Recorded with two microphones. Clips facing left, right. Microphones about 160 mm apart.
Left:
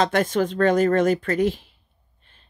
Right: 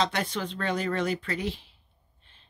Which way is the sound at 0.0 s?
50° left (ahead or behind).